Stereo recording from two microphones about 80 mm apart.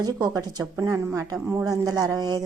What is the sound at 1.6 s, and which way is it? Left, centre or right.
Speech, right.